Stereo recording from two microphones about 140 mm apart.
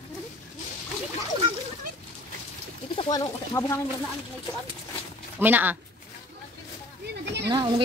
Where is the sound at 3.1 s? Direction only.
25° left (ahead or behind).